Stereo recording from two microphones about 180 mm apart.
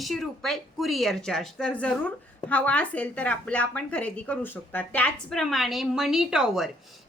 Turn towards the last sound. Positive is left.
turn(degrees=0)  # may be behind; listen again after turning